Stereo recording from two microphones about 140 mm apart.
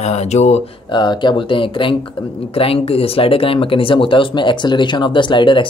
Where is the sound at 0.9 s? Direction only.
30° left (ahead or behind).